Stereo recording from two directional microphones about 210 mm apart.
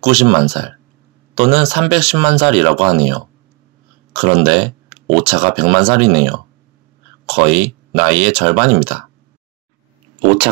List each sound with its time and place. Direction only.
0.1 s speech: 30° right (ahead or behind)